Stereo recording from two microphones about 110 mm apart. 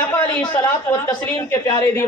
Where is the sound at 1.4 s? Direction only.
25° left (ahead or behind).